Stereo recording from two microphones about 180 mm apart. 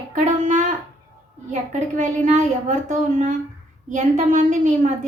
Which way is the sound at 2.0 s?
40° right (ahead or behind).